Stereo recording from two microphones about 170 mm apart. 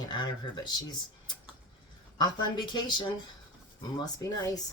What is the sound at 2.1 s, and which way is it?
Speech, 25° left (ahead or behind).